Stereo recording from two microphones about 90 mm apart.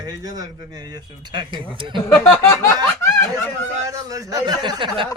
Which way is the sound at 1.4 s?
60° right (ahead or behind).